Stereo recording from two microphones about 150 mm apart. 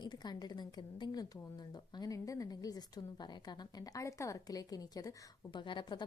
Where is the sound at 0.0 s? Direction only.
30° left (ahead or behind).